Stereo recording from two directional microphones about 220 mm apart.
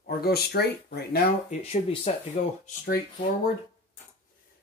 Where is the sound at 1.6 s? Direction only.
30° left (ahead or behind).